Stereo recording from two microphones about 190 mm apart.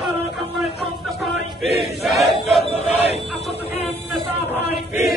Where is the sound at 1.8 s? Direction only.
Centre (ahead or behind).